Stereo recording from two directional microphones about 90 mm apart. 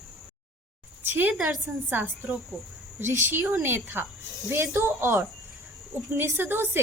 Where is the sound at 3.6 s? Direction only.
25° right (ahead or behind).